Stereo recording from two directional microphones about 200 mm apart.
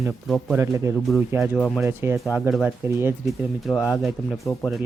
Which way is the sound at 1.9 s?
10° right (ahead or behind).